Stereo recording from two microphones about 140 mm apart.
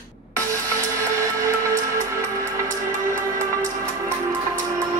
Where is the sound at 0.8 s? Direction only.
20° right (ahead or behind).